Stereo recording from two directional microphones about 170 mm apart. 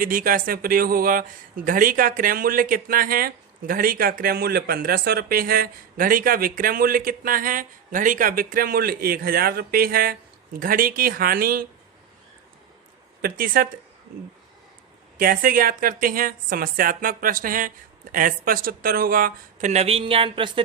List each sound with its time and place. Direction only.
0.0 s speech: 55° right (ahead or behind)
13.2 s speech: 60° right (ahead or behind)
15.2 s speech: 60° right (ahead or behind)
19.7 s a sound: 35° right (ahead or behind)